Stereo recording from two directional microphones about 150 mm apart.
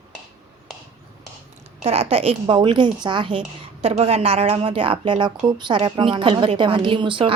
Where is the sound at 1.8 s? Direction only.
40° right (ahead or behind).